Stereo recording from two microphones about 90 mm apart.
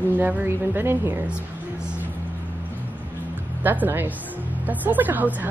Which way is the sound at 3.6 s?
20° right (ahead or behind).